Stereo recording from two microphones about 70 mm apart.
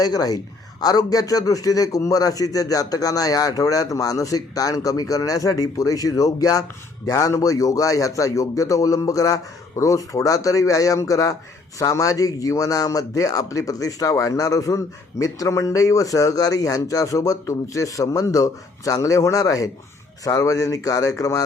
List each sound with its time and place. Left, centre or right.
0.0 s a man's voice: left